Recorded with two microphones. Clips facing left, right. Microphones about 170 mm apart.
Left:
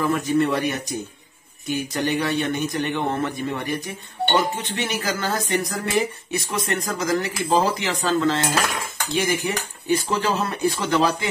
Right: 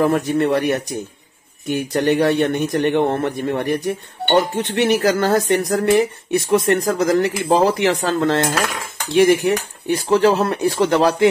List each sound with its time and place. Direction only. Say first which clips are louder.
0.0 s speech: right 4 dB; 55° right (ahead or behind)